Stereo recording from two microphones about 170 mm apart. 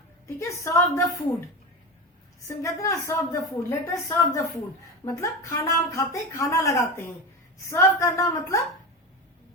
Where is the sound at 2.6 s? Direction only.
20° left (ahead or behind).